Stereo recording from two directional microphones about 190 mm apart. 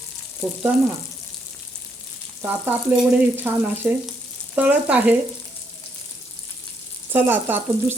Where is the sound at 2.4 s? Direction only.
10° right (ahead or behind).